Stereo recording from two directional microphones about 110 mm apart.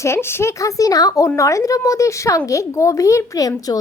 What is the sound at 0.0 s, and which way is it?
A woman's voice, 25° left (ahead or behind).